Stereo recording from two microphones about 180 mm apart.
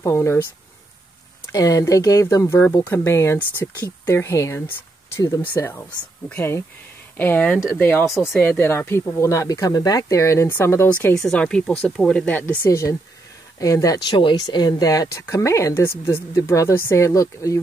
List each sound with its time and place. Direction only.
0.0 s speech: 15° left (ahead or behind)
1.5 s speech: 20° left (ahead or behind)